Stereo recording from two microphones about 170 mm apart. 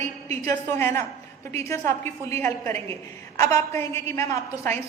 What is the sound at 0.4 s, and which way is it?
A woman's voice, 15° left (ahead or behind).